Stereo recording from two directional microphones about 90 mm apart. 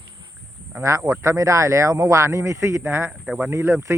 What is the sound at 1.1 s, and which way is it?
Speech, 35° right (ahead or behind).